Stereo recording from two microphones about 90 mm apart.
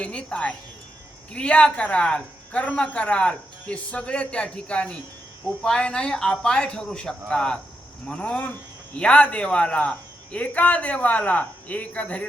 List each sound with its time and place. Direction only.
0.0 s speech: 10° left (ahead or behind)